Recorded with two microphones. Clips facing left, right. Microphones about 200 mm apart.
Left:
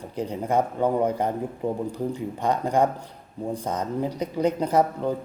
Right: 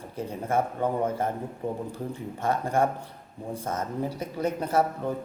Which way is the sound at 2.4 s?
15° left (ahead or behind).